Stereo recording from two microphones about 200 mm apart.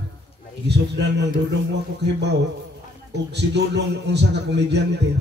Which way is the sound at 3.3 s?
60° right (ahead or behind).